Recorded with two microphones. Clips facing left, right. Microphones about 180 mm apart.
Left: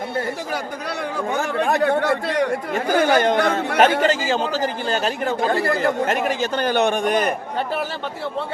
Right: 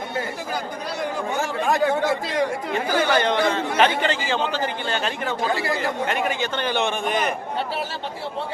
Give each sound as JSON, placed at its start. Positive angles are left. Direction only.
{"t": 1.4, "sound": "a man's voice", "side_deg": 60}
{"t": 2.7, "sound": "a man's voice", "side_deg": 45}
{"t": 6.2, "sound": "a man's voice", "side_deg": 40}